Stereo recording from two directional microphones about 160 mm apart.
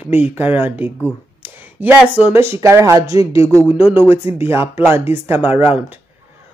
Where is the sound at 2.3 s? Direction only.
15° right (ahead or behind).